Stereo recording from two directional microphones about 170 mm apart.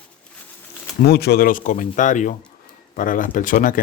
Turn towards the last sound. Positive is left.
turn(degrees=55)  # may be behind; listen again after turning